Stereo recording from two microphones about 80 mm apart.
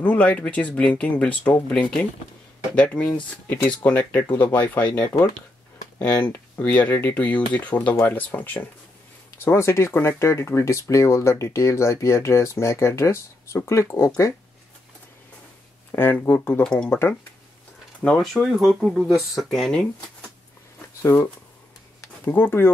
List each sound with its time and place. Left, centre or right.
0.0 s speech: centre
6.6 s speech: left
15.9 s speech: left
16.6 s speech: centre
18.2 s speech: centre
21.0 s speech: left